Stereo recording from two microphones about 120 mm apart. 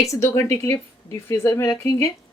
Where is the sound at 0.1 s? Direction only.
25° left (ahead or behind).